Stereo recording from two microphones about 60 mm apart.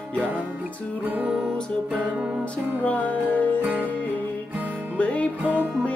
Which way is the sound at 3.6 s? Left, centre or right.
Right.